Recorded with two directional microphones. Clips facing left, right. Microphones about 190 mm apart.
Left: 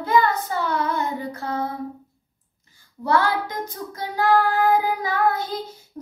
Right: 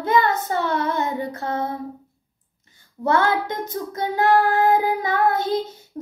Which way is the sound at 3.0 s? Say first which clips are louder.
Right 1 dB; 20° right (ahead or behind).